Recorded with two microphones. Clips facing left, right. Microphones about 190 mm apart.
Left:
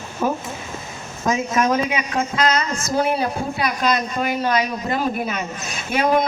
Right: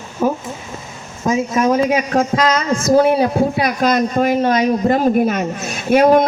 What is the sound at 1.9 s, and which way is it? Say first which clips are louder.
Speech: right 7 dB; 45° right (ahead or behind).